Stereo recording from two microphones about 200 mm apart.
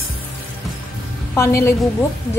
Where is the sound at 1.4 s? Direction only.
15° left (ahead or behind).